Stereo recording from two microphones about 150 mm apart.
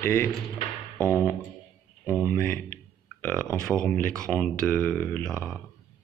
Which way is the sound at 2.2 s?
10° left (ahead or behind).